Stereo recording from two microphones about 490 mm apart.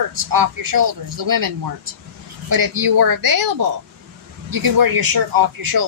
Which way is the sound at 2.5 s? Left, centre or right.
Right.